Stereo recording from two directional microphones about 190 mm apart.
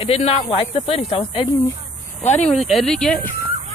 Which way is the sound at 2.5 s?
Centre (ahead or behind).